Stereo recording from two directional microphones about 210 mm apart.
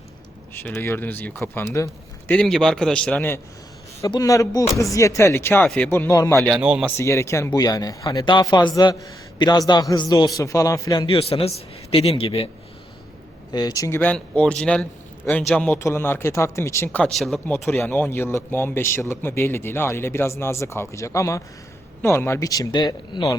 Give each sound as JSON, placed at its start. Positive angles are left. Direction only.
{"t": 0.5, "sound": "speech", "side_deg": 10}
{"t": 6.3, "sound": "speech", "side_deg": 0}
{"t": 6.9, "sound": "a man's voice", "side_deg": 15}
{"t": 13.5, "sound": "speech", "side_deg": 20}